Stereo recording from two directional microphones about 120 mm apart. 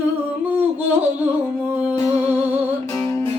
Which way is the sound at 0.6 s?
15° right (ahead or behind).